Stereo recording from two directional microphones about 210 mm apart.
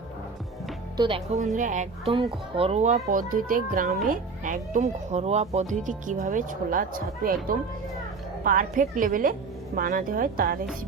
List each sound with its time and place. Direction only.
0.9 s a child's voice: 25° right (ahead or behind); by 10.6 s 45° right (ahead or behind)